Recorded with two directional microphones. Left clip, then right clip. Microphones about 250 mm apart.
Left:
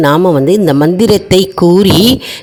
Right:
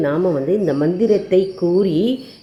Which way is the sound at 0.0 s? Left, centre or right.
Left.